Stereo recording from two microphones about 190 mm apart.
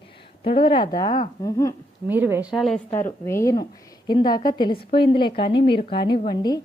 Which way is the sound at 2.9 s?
15° left (ahead or behind).